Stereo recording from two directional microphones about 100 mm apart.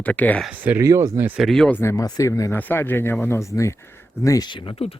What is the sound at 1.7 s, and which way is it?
Speech, 25° left (ahead or behind).